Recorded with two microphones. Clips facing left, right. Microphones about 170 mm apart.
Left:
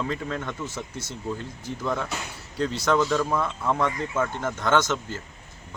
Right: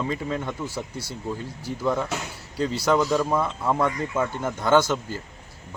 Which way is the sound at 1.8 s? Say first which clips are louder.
Right 4 dB; 10° right (ahead or behind).